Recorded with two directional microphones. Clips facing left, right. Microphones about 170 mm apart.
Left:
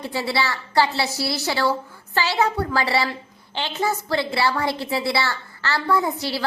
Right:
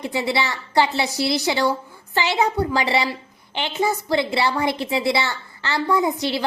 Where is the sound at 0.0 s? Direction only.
20° right (ahead or behind).